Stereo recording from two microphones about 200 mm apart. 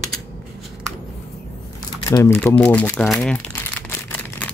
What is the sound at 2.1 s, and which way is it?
Speech, 15° left (ahead or behind).